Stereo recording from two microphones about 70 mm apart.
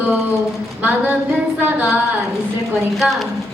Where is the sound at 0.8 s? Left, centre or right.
Right.